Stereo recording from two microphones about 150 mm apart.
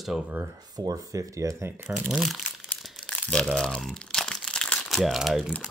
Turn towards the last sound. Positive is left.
turn(degrees=0)  # may be behind; listen again after turning